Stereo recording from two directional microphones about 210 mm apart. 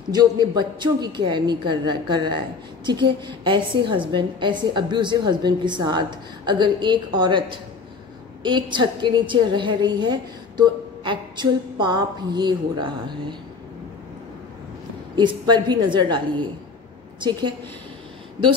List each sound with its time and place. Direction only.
0.1 s a woman's voice: 20° right (ahead or behind)
15.1 s a woman's voice: 20° right (ahead or behind)